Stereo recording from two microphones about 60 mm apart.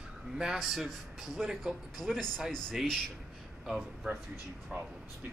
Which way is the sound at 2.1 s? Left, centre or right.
Centre.